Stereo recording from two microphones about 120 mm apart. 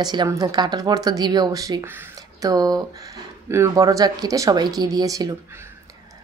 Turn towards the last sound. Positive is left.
turn(degrees=-30)  # may be behind; listen again after turning